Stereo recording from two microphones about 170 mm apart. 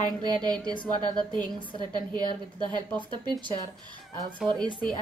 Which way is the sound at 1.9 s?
25° right (ahead or behind).